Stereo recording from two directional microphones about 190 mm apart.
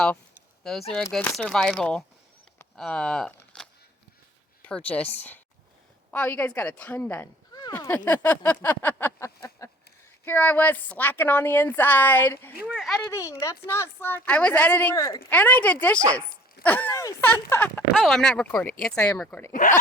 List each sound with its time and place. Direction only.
0.6 s speech: centre (ahead or behind)
12.6 s speech: centre (ahead or behind)
13.1 s speech: 15° left (ahead or behind)